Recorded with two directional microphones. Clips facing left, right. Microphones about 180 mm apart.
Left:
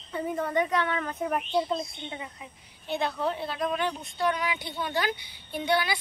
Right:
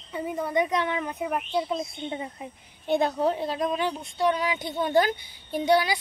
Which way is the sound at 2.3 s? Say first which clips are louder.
Right 6 dB; 50° right (ahead or behind).